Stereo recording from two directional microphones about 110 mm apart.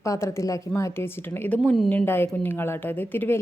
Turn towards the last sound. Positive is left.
turn(degrees=15)  # may be behind; listen again after turning